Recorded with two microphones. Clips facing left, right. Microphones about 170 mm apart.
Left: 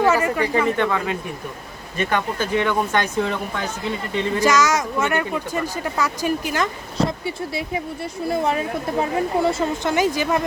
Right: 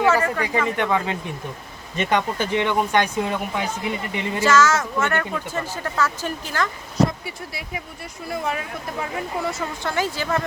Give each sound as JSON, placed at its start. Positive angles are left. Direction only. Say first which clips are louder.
{"t": 0.0, "sound": "a sound", "louder": "left 1 dB", "side_deg": 15}
{"t": 0.8, "sound": "speech", "louder": "left 1 dB", "side_deg": -15}
{"t": 4.4, "sound": "speech", "louder": "right 1 dB", "side_deg": 15}
{"t": 6.9, "sound": "speech", "louder": "right 3 dB", "side_deg": 25}
{"t": 9.9, "sound": "speech", "louder": "left 2 dB", "side_deg": 15}